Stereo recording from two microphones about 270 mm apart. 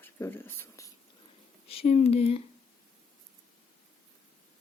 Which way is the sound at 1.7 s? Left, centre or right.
Left.